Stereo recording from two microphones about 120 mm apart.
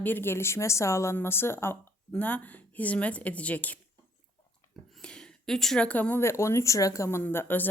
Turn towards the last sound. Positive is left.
turn(degrees=15)  # may be behind; listen again after turning